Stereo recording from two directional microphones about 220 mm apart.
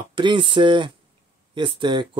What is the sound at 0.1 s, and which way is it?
Speech, 20° right (ahead or behind).